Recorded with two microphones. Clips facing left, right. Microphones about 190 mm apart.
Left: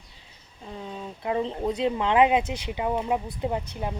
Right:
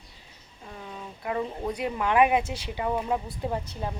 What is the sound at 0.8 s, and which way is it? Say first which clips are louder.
Speech: left 4 dB; 25° left (ahead or behind).